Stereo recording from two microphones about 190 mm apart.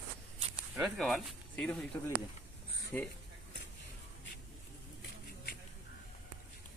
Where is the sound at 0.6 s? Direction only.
5° right (ahead or behind).